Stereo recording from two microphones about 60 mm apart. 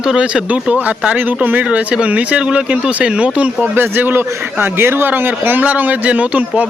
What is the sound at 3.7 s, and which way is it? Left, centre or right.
A man's voice, right.